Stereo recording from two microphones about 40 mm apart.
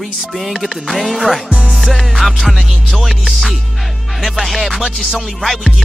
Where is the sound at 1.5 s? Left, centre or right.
Right.